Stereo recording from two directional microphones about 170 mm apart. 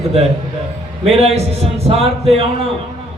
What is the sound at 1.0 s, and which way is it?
A man's voice, 40° right (ahead or behind).